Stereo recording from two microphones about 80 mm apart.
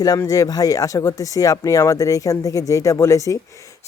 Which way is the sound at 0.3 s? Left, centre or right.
Left.